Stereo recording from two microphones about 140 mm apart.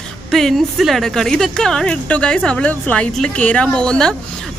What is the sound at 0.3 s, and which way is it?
Speech, centre (ahead or behind).